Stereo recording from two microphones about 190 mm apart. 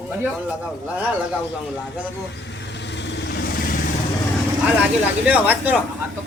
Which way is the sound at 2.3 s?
65° left (ahead or behind).